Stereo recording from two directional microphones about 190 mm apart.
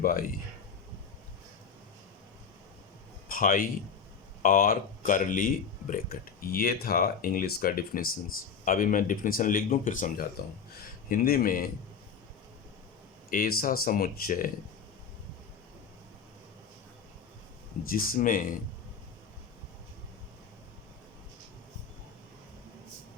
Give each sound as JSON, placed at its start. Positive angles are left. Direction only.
{"t": 0.0, "sound": "speech", "side_deg": 45}
{"t": 3.2, "sound": "a man's voice", "side_deg": 45}
{"t": 13.3, "sound": "speech", "side_deg": 50}
{"t": 17.8, "sound": "speech", "side_deg": 50}